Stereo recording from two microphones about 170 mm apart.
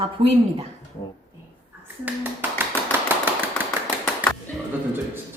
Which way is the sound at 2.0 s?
10° right (ahead or behind).